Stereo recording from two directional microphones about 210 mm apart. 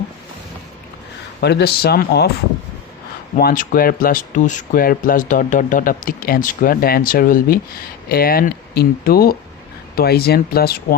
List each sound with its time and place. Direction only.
1.4 s speech: 50° left (ahead or behind)
3.3 s speech: 40° left (ahead or behind)